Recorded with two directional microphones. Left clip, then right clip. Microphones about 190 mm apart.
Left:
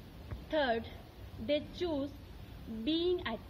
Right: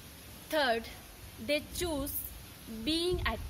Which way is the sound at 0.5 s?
10° right (ahead or behind).